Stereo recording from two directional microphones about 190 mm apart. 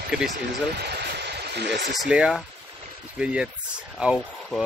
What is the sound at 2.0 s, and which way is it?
Speech, 5° right (ahead or behind).